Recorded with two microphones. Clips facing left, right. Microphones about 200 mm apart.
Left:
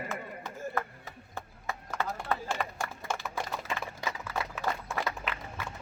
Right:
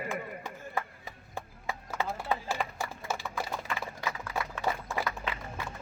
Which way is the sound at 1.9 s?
10° right (ahead or behind).